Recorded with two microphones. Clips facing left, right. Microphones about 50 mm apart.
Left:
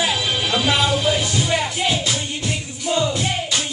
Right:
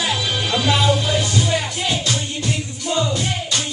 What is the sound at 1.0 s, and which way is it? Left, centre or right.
Music, centre.